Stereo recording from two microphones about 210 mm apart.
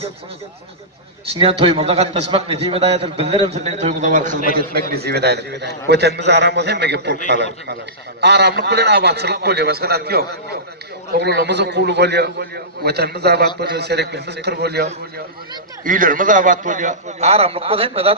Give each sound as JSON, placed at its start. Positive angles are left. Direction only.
{"t": 1.3, "sound": "a man's voice", "side_deg": -30}
{"t": 4.7, "sound": "a man's voice", "side_deg": -50}
{"t": 15.8, "sound": "a man's voice", "side_deg": -40}